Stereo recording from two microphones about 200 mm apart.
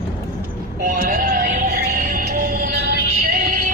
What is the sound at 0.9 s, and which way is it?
Music, 45° right (ahead or behind).